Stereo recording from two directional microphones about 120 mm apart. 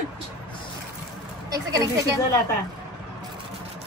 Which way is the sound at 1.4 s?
30° right (ahead or behind).